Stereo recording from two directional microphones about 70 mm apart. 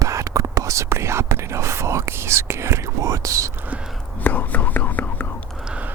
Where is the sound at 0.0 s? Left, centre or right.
Right.